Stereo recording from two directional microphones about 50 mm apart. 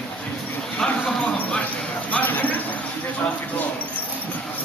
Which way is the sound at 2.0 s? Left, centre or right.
Left.